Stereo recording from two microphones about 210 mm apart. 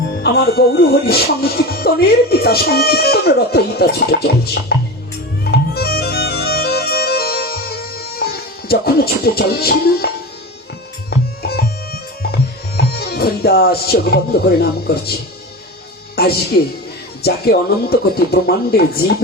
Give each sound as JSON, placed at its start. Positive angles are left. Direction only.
{"t": 0.2, "sound": "speech", "side_deg": 45}
{"t": 5.5, "sound": "music", "side_deg": 50}
{"t": 11.1, "sound": "music", "side_deg": 50}
{"t": 16.2, "sound": "speech", "side_deg": 45}